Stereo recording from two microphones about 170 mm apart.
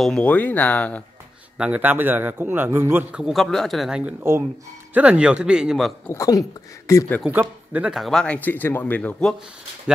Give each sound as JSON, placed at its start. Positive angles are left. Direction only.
{"t": 0.0, "sound": "speech", "side_deg": 5}
{"t": 1.6, "sound": "a man's voice", "side_deg": -10}
{"t": 6.0, "sound": "speech", "side_deg": 20}
{"t": 7.2, "sound": "speech", "side_deg": -10}